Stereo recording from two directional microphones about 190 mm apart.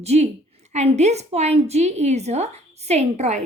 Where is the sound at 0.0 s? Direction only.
35° right (ahead or behind).